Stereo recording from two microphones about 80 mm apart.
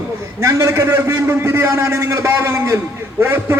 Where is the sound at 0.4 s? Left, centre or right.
Right.